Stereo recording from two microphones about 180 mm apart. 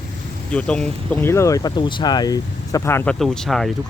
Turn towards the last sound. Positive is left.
turn(degrees=0)  # may be behind; listen again after turning